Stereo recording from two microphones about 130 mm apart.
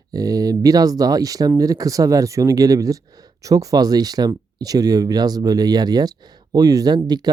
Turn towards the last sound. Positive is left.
turn(degrees=-30)  # may be behind; listen again after turning